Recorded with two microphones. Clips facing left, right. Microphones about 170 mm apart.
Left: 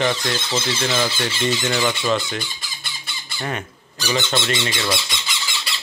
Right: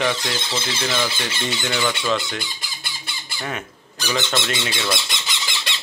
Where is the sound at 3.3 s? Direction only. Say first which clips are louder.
Left 2 dB; centre (ahead or behind).